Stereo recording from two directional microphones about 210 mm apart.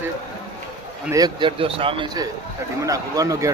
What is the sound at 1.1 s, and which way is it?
Speech, 20° right (ahead or behind).